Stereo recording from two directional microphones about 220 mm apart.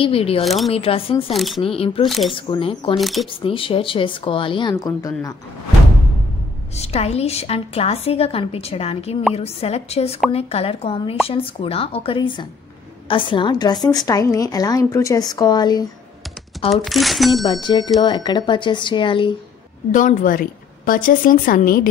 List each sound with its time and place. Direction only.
0.0 s a woman's voice: 25° left (ahead or behind)
1.3 s speech: centre (ahead or behind)
1.6 s a woman's voice: 25° left (ahead or behind)
2.0 s speech: centre (ahead or behind)
2.3 s a woman's voice: 25° left (ahead or behind)
3.0 s speech: centre (ahead or behind)
3.4 s a woman's voice: 25° left (ahead or behind)
6.8 s a woman's voice: 30° left (ahead or behind)
16.7 s speech: centre (ahead or behind)
17.5 s a woman's voice: 20° left (ahead or behind)
19.9 s a woman's voice: 35° left (ahead or behind)